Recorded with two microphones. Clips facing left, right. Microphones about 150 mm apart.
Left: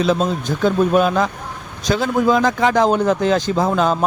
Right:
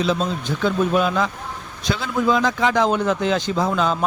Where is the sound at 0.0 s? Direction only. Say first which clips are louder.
Left 4 dB; 45° left (ahead or behind).